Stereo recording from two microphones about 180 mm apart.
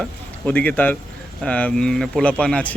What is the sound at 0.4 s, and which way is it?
Speech, 10° left (ahead or behind).